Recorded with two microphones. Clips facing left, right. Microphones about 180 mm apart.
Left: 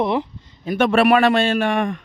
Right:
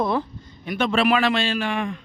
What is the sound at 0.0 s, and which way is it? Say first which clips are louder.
Speech: left 3 dB; 15° left (ahead or behind).